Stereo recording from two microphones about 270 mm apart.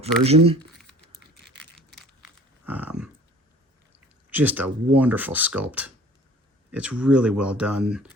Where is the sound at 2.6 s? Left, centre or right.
Centre.